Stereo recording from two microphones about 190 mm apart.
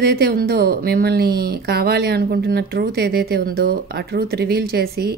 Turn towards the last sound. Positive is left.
turn(degrees=-55)  # may be behind; listen again after turning